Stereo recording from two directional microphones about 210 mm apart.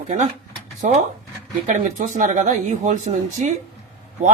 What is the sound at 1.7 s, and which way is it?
Speech, 35° right (ahead or behind).